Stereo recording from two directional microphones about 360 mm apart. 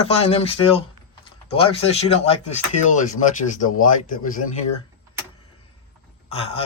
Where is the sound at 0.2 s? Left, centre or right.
Centre.